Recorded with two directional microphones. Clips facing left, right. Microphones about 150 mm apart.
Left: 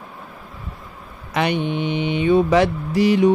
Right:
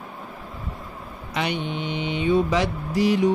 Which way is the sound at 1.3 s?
60° left (ahead or behind).